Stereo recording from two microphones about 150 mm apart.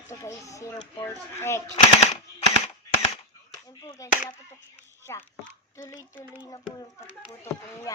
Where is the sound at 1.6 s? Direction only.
45° left (ahead or behind).